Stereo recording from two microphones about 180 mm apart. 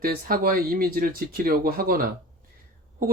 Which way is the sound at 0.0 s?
55° right (ahead or behind).